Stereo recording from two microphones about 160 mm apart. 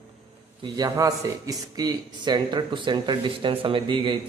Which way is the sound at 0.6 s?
25° right (ahead or behind).